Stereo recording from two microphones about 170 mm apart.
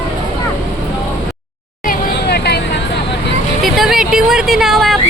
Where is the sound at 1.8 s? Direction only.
70° left (ahead or behind).